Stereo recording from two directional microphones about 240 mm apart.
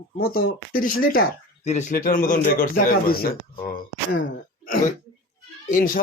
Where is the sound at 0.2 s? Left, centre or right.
Left.